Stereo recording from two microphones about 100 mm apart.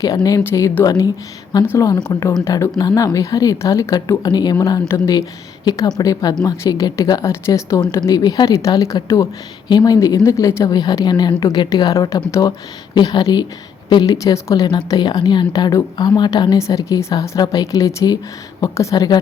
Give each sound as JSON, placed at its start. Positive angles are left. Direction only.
{"t": 0.0, "sound": "a woman's voice", "side_deg": 35}
{"t": 2.4, "sound": "a woman's voice", "side_deg": 25}
{"t": 11.9, "sound": "a woman's voice", "side_deg": 30}
{"t": 18.9, "sound": "a woman's voice", "side_deg": 40}